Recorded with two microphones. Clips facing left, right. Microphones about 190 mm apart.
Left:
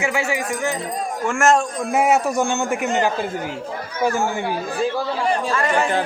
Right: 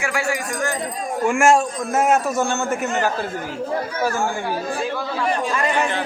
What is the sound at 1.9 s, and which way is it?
Speech, 10° left (ahead or behind).